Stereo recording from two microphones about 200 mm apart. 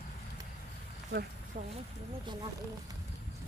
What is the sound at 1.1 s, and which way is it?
Speech, 55° right (ahead or behind).